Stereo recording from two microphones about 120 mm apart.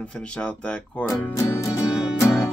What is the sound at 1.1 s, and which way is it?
Speech, 20° left (ahead or behind).